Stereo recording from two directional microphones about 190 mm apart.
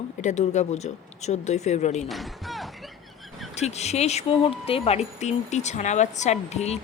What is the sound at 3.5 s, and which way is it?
Speech, 35° left (ahead or behind).